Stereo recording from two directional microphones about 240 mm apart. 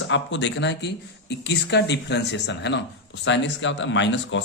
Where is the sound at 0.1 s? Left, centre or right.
Left.